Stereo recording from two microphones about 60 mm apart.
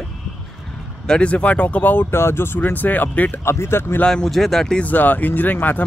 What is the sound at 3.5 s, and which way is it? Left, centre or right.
Speech, left.